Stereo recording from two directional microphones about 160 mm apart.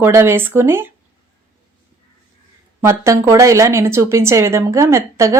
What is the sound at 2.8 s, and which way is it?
A woman's voice, 15° right (ahead or behind).